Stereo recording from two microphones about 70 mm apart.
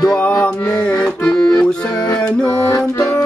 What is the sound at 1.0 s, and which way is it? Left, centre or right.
Music, centre.